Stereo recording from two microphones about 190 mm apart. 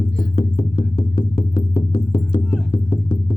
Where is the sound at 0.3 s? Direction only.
30° left (ahead or behind).